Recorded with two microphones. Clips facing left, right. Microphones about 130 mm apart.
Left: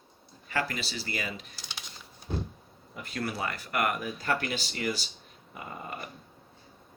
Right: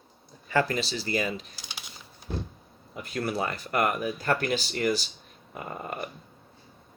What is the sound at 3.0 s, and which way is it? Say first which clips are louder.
Speech: right 4 dB; 25° right (ahead or behind).